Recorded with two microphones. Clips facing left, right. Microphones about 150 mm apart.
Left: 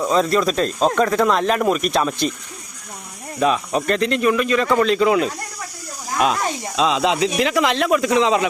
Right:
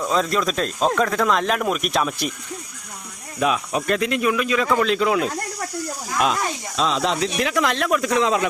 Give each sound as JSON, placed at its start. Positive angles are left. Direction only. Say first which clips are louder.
{"t": 0.1, "sound": "speech", "louder": "left 3 dB", "side_deg": 0}
{"t": 3.4, "sound": "speech", "louder": "left 3 dB", "side_deg": -5}
{"t": 6.7, "sound": "speech", "louder": "left 3 dB", "side_deg": 0}